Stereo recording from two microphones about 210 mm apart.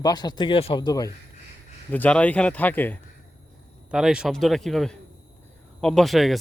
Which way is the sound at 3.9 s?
5° right (ahead or behind).